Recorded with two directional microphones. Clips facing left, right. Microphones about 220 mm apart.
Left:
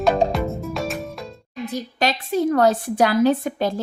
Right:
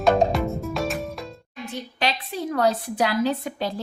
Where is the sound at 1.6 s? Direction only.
40° left (ahead or behind).